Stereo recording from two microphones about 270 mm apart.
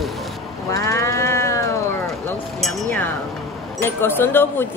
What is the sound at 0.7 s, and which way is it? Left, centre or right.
Livestock, centre.